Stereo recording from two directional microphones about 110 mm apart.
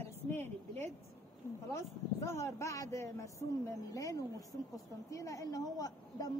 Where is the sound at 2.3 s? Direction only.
25° left (ahead or behind).